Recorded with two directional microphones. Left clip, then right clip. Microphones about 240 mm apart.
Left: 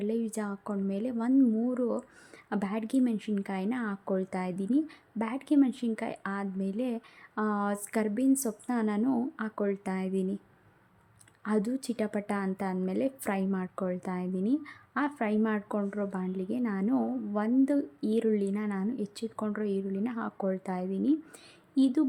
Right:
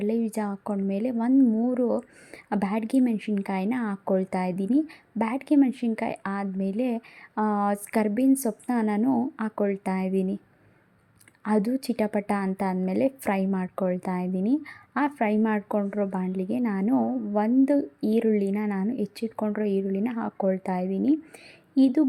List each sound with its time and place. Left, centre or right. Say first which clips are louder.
0.0 s speech: right 5 dB; centre
11.4 s speech: right 5 dB; centre